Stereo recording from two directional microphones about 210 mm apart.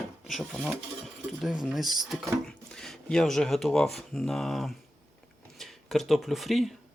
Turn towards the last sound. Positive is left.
turn(degrees=0)  # may be behind; listen again after turning